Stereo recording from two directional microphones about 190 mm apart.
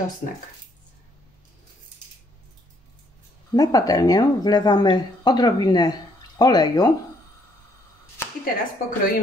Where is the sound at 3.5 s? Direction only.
20° left (ahead or behind).